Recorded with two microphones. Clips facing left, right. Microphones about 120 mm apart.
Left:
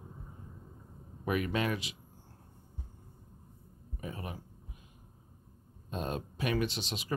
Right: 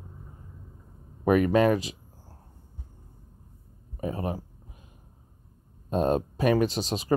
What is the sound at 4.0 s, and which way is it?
Speech, 35° right (ahead or behind).